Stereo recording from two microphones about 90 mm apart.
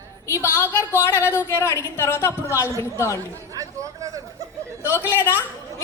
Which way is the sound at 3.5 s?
35° right (ahead or behind).